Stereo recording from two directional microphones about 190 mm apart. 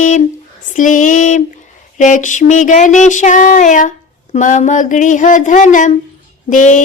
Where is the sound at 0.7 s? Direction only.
40° left (ahead or behind).